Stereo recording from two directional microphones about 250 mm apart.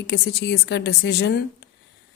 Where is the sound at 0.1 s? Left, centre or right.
Left.